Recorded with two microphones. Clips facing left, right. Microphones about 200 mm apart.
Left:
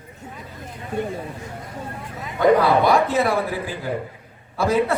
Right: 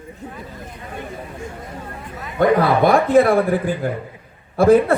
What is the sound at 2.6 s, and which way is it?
A man's voice, 55° right (ahead or behind).